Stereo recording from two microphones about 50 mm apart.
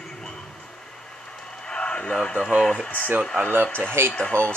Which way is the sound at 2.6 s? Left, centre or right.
Centre.